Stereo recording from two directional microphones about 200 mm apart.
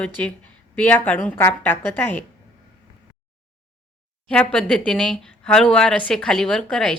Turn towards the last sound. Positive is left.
turn(degrees=5)  # may be behind; listen again after turning